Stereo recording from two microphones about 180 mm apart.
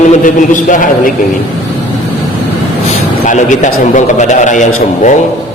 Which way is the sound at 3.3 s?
45° left (ahead or behind).